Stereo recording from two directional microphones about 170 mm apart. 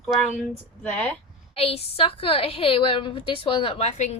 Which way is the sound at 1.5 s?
35° left (ahead or behind).